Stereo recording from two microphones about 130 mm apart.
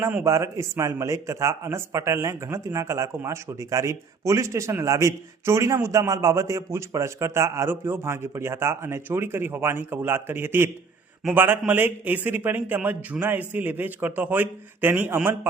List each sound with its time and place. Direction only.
0.0 s a man's voice: 10° right (ahead or behind)
0.3 s a man's voice: 25° right (ahead or behind)